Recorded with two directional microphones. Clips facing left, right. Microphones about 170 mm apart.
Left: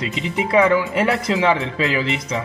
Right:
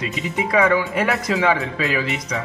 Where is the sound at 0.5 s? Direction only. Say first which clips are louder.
Left 2 dB; 25° left (ahead or behind).